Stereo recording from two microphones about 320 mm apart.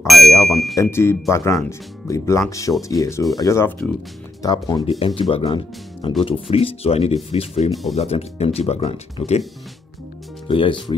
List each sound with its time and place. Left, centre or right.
0.0 s speech: centre
10.5 s speech: centre